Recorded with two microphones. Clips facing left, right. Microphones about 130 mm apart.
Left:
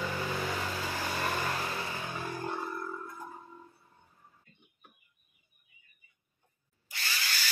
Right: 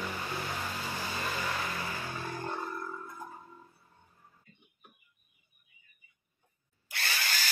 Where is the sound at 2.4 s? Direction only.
5° left (ahead or behind).